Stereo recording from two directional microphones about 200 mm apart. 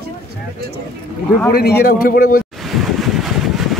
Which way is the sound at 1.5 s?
50° left (ahead or behind).